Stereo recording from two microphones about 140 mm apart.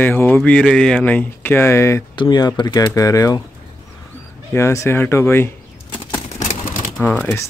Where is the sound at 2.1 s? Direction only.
30° left (ahead or behind).